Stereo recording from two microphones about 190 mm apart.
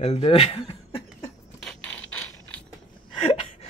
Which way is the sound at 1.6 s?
5° left (ahead or behind).